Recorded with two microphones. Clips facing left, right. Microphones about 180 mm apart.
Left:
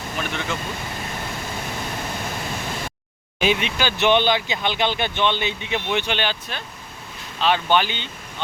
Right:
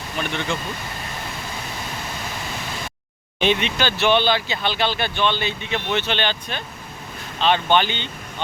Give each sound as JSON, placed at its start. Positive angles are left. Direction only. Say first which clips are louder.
{"t": 0.2, "sound": "speech", "louder": "right 3 dB", "side_deg": 0}
{"t": 3.4, "sound": "speech", "louder": "right 1 dB", "side_deg": 5}